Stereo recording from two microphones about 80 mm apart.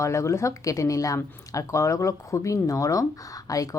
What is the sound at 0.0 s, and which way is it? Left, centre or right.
A woman's voice, left.